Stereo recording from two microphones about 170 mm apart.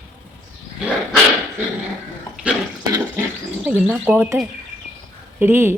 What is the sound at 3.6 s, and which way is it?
Speech, 10° right (ahead or behind).